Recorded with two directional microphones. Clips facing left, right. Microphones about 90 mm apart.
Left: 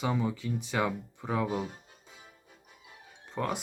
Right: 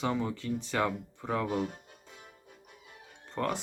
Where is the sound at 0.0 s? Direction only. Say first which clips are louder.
Left 1 dB; 10° left (ahead or behind).